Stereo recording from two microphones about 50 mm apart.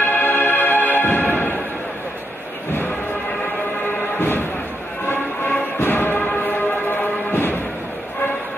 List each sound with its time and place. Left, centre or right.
0.0 s music: left
4.2 s thump: left
5.0 s music: left